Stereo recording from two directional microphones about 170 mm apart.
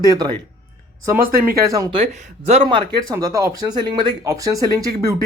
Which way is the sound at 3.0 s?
20° right (ahead or behind).